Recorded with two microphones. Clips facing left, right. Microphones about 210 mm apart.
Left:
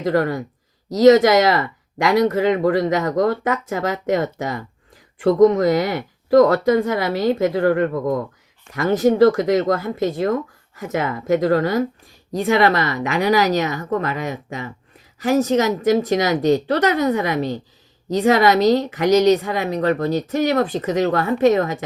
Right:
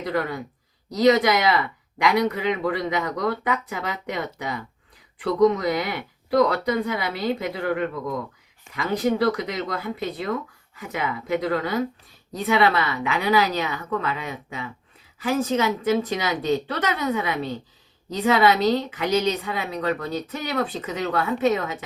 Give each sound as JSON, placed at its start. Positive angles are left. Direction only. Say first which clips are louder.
{"t": 0.2, "sound": "speech", "louder": "left 6 dB", "side_deg": 45}